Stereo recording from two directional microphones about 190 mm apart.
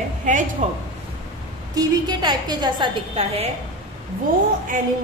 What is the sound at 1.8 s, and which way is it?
A woman's voice, 20° right (ahead or behind).